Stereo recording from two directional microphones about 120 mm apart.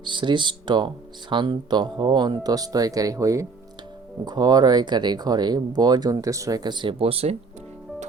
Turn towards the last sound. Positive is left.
turn(degrees=-55)  # may be behind; listen again after turning